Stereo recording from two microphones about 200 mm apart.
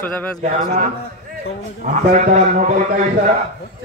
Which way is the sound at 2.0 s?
40° right (ahead or behind).